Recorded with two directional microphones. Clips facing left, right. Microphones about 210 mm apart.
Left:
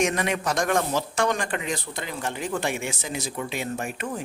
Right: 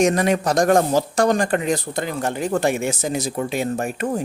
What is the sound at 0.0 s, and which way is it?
Speech, 40° right (ahead or behind).